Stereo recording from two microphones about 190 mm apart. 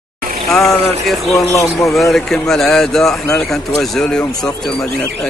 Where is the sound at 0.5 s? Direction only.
Centre (ahead or behind).